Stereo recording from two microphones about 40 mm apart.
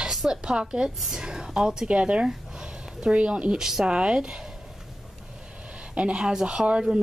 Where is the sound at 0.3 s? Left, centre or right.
Right.